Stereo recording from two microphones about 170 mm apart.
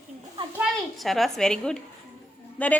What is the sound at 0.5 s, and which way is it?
A child's voice, centre (ahead or behind).